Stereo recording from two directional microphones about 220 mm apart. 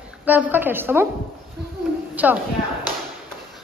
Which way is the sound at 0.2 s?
10° right (ahead or behind).